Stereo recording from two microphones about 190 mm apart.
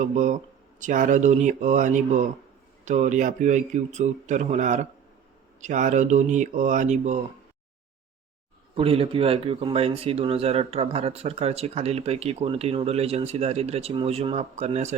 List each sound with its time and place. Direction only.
0.0 s speech: 40° right (ahead or behind)
8.7 s speech: 30° right (ahead or behind)